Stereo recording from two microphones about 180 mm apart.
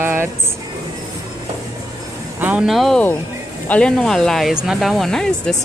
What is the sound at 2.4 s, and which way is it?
Speech, 5° right (ahead or behind).